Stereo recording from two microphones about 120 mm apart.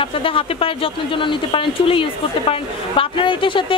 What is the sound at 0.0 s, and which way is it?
Speech, 50° left (ahead or behind).